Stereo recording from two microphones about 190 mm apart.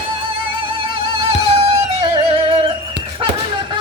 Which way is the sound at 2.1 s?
30° right (ahead or behind).